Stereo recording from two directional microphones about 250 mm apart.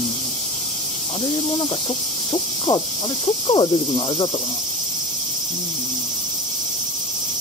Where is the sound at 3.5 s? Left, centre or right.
Centre.